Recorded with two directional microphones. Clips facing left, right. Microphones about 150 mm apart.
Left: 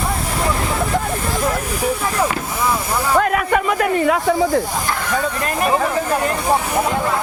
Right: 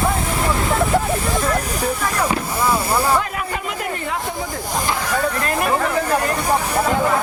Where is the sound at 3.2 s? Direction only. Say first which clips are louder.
Left 7 dB; 70° left (ahead or behind).